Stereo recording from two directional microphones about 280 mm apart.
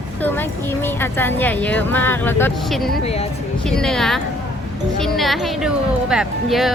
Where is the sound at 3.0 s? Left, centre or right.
Left.